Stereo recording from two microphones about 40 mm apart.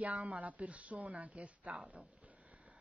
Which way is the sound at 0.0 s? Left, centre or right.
Right.